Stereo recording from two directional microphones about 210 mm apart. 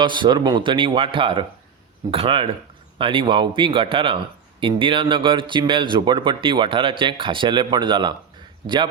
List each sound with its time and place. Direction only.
0.0 s speech: 20° right (ahead or behind)